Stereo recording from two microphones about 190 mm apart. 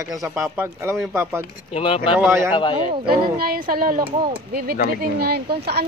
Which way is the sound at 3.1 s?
50° right (ahead or behind).